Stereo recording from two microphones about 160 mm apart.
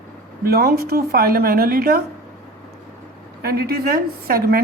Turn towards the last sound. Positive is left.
turn(degrees=-70)  # may be behind; listen again after turning